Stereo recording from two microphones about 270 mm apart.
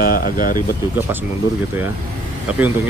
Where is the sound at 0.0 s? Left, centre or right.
Left.